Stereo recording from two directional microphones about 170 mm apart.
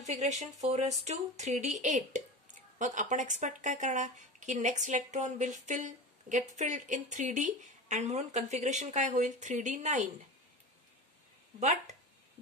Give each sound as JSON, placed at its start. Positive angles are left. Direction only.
{"t": 0.0, "sound": "speech", "side_deg": -40}